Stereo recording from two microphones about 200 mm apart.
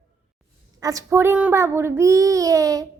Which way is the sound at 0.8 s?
15° right (ahead or behind).